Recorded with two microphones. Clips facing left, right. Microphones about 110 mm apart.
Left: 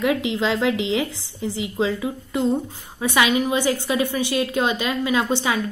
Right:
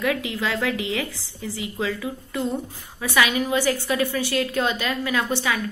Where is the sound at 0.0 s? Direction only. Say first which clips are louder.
Left 4 dB; 20° left (ahead or behind).